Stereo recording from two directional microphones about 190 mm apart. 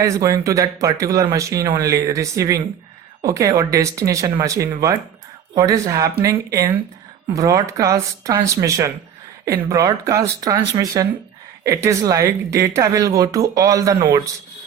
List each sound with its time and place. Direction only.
0.0 s speech: 15° right (ahead or behind)